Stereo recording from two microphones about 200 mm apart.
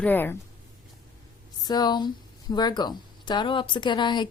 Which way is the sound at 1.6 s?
20° left (ahead or behind).